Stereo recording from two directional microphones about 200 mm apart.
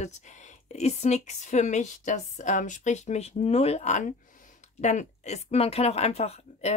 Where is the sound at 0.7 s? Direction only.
35° left (ahead or behind).